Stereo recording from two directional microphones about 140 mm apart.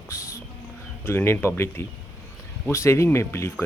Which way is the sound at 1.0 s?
15° left (ahead or behind).